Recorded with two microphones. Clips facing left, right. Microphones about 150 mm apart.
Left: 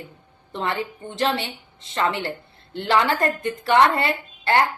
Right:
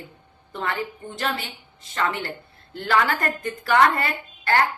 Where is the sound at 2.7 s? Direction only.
25° left (ahead or behind).